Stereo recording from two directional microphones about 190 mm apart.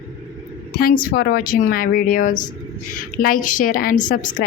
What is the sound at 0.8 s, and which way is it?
A woman's voice, 50° left (ahead or behind).